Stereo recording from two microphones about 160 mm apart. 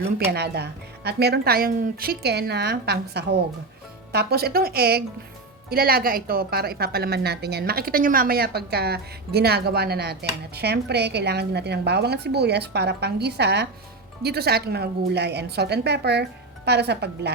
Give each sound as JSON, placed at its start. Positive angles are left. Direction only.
{"t": 0.3, "sound": "a woman's voice", "side_deg": -90}